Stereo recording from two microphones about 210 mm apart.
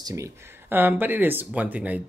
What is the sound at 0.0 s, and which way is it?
Speech, 15° right (ahead or behind).